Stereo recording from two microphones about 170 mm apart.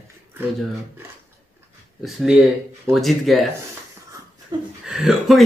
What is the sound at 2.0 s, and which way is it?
Speech, centre (ahead or behind).